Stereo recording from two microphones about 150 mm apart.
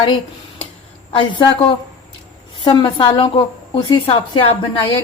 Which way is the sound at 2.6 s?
35° left (ahead or behind).